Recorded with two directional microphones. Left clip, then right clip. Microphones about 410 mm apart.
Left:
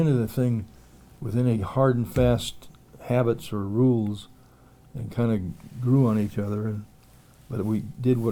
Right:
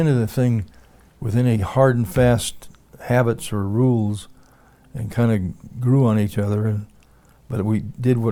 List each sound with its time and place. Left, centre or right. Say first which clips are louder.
0.0 s speech: right 4 dB; right